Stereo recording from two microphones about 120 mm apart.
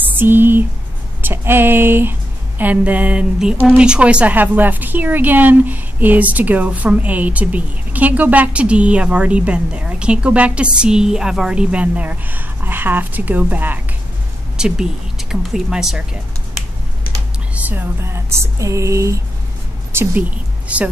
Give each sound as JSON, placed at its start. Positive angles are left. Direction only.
{"t": 0.1, "sound": "a woman's voice", "side_deg": -15}
{"t": 14.6, "sound": "speech", "side_deg": -5}
{"t": 17.6, "sound": "a sound", "side_deg": -20}
{"t": 19.9, "sound": "a woman's voice", "side_deg": -15}